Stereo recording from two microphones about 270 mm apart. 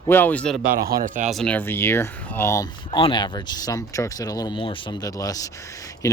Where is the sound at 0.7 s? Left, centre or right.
Right.